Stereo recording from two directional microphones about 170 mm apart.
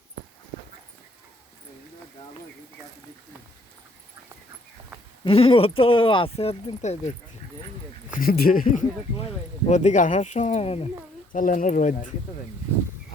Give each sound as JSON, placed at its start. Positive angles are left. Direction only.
{"t": 5.2, "sound": "speech", "side_deg": 35}
{"t": 8.2, "sound": "speech", "side_deg": 60}
{"t": 9.6, "sound": "speech", "side_deg": 45}
{"t": 11.3, "sound": "speech", "side_deg": 50}